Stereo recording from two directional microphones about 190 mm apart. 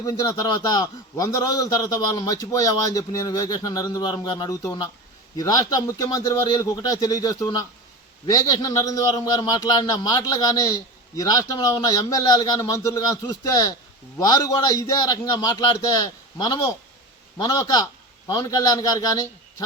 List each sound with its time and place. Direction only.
0.0 s a man's voice: 20° left (ahead or behind)